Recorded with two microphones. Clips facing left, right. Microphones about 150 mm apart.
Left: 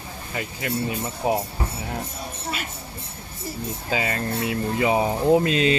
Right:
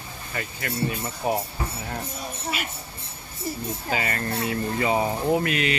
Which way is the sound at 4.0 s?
15° left (ahead or behind).